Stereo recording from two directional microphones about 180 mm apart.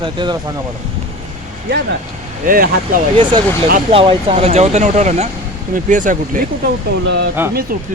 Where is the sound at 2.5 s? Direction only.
50° right (ahead or behind).